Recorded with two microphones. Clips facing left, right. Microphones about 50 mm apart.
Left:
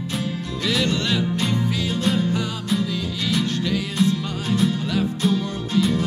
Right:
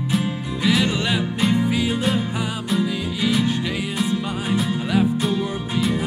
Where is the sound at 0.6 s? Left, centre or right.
Centre.